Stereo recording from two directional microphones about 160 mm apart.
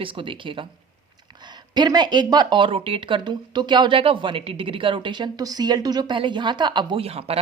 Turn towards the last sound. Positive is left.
turn(degrees=-40)  # may be behind; listen again after turning